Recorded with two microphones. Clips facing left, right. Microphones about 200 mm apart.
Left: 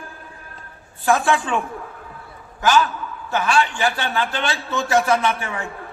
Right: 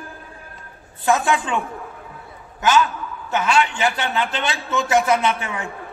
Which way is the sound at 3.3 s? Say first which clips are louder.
Even; 20° right (ahead or behind).